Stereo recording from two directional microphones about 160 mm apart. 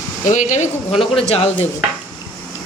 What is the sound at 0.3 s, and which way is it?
Speech, 50° left (ahead or behind).